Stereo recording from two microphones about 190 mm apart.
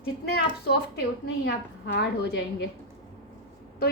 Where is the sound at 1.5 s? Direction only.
60° left (ahead or behind).